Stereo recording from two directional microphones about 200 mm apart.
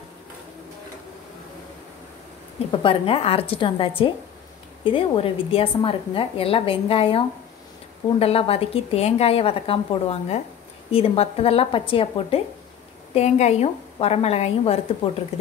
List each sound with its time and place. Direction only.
2.7 s a woman's voice: 25° left (ahead or behind)